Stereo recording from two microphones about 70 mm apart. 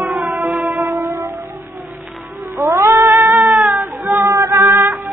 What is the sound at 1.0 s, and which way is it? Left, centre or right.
Music, right.